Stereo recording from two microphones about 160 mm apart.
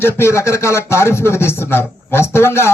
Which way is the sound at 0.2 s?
20° left (ahead or behind).